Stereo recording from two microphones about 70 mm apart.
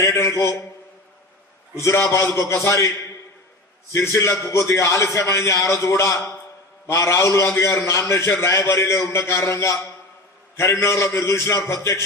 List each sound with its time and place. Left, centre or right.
0.0 s a sound: left
1.8 s a man's voice: left
3.9 s a man's voice: left